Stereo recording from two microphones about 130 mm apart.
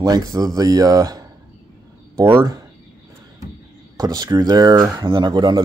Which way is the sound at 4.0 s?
30° right (ahead or behind).